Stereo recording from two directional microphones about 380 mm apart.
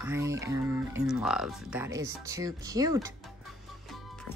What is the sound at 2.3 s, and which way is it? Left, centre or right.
Music, centre.